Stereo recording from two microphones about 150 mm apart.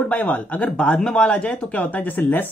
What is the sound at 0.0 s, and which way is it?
A woman's voice, 10° left (ahead or behind).